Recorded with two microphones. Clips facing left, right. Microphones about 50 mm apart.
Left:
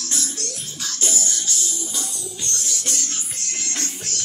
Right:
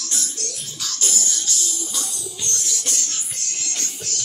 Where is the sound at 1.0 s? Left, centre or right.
Centre.